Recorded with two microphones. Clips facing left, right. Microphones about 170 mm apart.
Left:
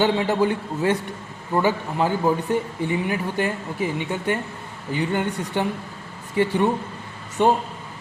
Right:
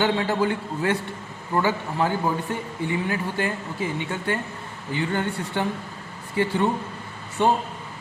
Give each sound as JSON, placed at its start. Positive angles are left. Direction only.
{"t": 0.0, "sound": "a man's voice", "side_deg": 20}